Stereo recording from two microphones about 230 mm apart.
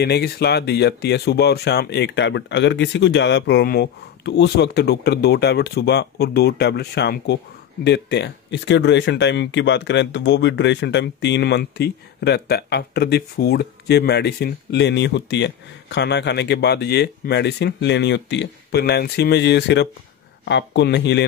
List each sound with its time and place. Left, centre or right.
0.0 s speech: left